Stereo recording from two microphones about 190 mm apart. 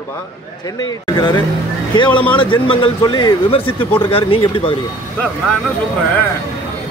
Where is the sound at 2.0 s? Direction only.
5° left (ahead or behind).